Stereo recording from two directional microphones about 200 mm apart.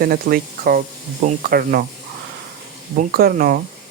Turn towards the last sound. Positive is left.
turn(degrees=-45)  # may be behind; listen again after turning